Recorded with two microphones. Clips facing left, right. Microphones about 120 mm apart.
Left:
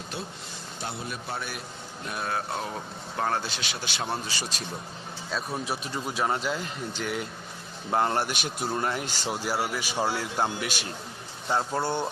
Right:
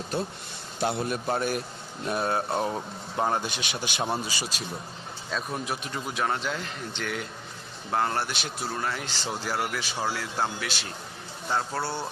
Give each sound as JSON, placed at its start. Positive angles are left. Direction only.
{"t": 0.8, "sound": "a man's voice", "side_deg": -65}
{"t": 2.0, "sound": "speech", "side_deg": -25}
{"t": 3.2, "sound": "speech", "side_deg": -15}
{"t": 5.9, "sound": "speech", "side_deg": 10}
{"t": 7.9, "sound": "speech", "side_deg": 20}
{"t": 8.7, "sound": "speech", "side_deg": 25}
{"t": 9.0, "sound": "speech", "side_deg": 10}